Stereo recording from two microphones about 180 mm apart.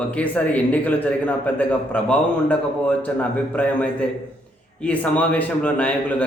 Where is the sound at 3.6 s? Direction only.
10° left (ahead or behind).